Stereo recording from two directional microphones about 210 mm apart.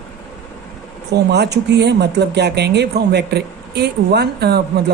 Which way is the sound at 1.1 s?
50° right (ahead or behind).